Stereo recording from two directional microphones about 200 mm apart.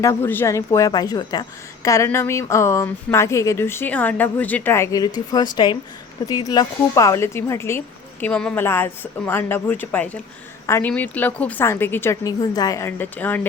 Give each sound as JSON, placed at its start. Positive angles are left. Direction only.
{"t": 0.0, "sound": "a woman's voice", "side_deg": 10}